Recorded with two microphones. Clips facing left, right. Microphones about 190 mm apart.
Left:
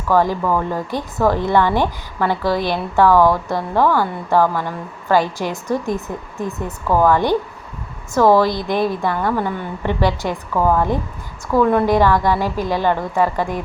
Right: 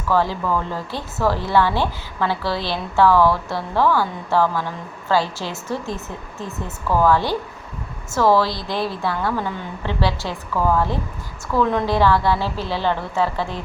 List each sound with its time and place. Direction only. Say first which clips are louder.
0.1 s a woman's voice: left 4 dB; 15° left (ahead or behind)
8.4 s a woman's voice: left 5 dB; 20° left (ahead or behind)